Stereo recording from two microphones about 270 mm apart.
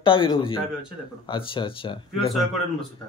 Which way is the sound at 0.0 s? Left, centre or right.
Centre.